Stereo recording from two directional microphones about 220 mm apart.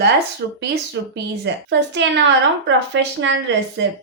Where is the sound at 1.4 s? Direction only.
50° right (ahead or behind).